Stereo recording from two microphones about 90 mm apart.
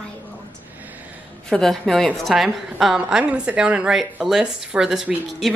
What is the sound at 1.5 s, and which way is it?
A woman's voice, 5° left (ahead or behind).